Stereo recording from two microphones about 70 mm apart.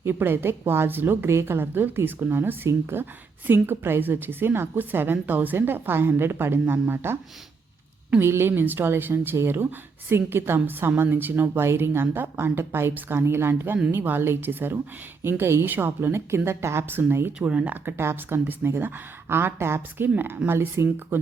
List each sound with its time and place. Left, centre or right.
0.0 s speech: right
8.2 s speech: right
17.4 s speech: centre
17.8 s speech: right